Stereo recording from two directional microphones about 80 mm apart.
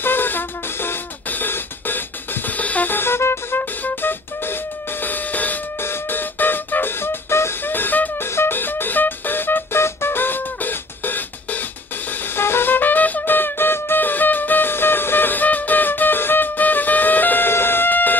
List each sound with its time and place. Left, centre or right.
0.0 s music: left